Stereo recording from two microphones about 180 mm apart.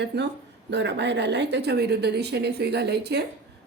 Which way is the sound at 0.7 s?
70° right (ahead or behind).